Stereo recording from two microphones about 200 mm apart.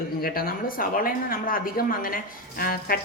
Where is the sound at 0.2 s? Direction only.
45° left (ahead or behind).